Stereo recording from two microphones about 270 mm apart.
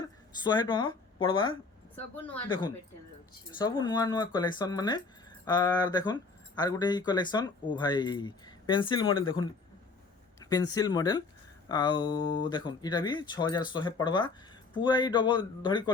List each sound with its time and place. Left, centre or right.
0.0 s speech: centre
3.6 s speech: centre
10.4 s speech: centre